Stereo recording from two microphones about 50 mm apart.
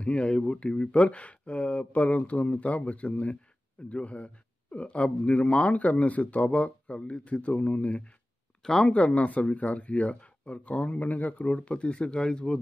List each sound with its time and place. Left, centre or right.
0.0 s speech: left